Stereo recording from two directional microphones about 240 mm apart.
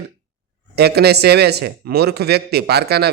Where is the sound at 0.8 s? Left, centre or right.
Right.